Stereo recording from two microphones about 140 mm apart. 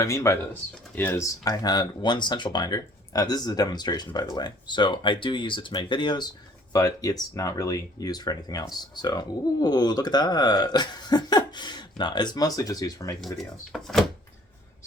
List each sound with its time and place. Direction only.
0.0 s speech: 20° left (ahead or behind)
13.7 s speech: centre (ahead or behind)